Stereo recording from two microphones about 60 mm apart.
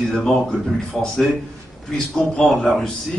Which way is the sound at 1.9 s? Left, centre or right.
Centre.